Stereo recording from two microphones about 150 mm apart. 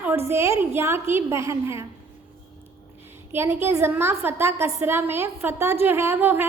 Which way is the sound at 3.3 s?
15° right (ahead or behind).